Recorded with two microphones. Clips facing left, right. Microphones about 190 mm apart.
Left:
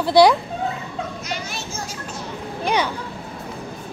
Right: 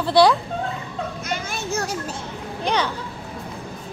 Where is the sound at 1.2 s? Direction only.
50° right (ahead or behind).